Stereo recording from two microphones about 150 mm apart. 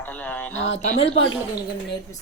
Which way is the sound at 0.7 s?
45° left (ahead or behind).